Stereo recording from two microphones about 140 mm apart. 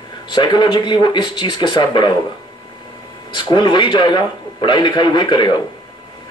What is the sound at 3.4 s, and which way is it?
Speech, 35° left (ahead or behind).